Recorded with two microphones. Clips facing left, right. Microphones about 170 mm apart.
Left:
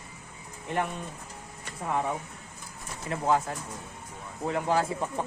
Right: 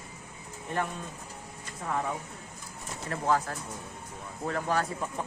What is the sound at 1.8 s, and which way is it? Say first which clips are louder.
Speech: left 2 dB; 20° left (ahead or behind).